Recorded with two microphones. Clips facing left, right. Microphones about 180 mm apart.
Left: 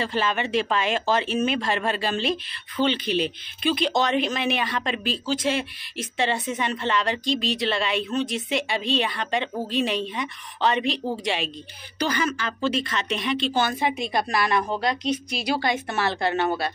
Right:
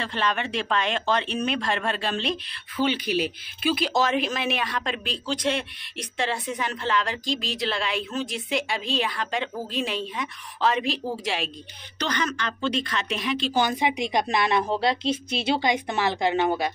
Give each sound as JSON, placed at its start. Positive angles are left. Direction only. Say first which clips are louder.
{"t": 0.0, "sound": "speech", "louder": "left 2 dB", "side_deg": 5}
{"t": 2.8, "sound": "speech", "louder": "left 1 dB", "side_deg": -10}
{"t": 13.6, "sound": "a woman's voice", "louder": "even", "side_deg": -15}